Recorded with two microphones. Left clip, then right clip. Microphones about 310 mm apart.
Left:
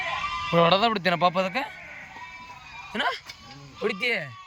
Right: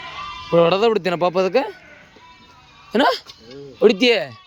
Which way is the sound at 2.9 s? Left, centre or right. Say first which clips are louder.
Right 11 dB; right.